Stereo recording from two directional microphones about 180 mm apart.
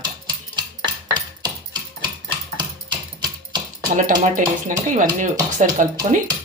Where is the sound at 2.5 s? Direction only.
25° right (ahead or behind).